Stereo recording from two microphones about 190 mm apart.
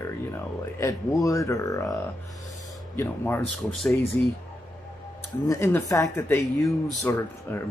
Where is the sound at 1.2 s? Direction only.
15° left (ahead or behind).